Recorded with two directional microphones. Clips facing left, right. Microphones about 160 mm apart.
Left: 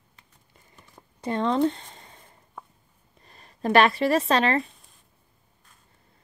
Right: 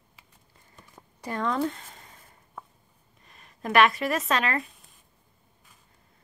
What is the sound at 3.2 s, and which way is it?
Speech, 35° left (ahead or behind).